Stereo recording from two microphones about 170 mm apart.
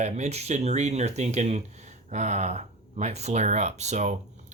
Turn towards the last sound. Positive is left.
turn(degrees=-45)  # may be behind; listen again after turning